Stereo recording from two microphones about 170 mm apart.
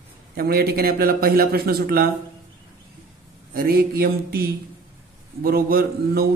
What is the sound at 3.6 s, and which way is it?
Speech, 65° right (ahead or behind).